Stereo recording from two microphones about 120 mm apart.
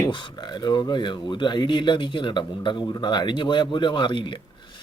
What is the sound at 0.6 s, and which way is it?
Speech, 35° left (ahead or behind).